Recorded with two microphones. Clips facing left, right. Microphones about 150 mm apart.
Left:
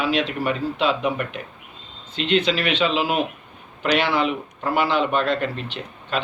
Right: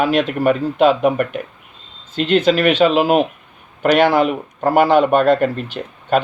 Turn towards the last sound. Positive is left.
turn(degrees=-45)  # may be behind; listen again after turning